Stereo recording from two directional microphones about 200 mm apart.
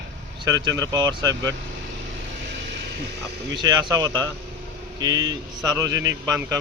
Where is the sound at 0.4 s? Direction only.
20° right (ahead or behind).